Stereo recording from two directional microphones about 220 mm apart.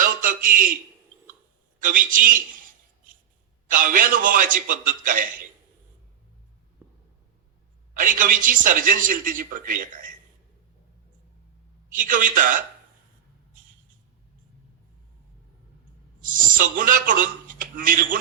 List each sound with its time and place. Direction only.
0.0 s a sound: 40° right (ahead or behind)
1.8 s a man's voice: 40° right (ahead or behind)
3.7 s speech: 40° right (ahead or behind)
6.8 s a sound: 15° right (ahead or behind)
7.9 s speech: 40° right (ahead or behind)
11.9 s speech: 40° right (ahead or behind)
16.2 s speech: 40° right (ahead or behind)